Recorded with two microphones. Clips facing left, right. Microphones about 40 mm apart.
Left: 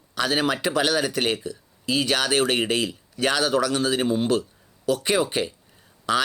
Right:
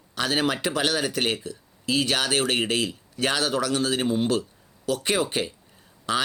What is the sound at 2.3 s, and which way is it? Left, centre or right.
Speech, left.